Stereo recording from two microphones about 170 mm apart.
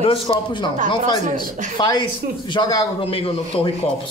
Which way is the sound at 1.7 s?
25° left (ahead or behind).